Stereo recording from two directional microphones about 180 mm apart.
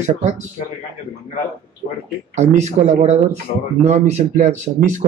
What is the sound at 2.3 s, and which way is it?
Speech, 40° right (ahead or behind).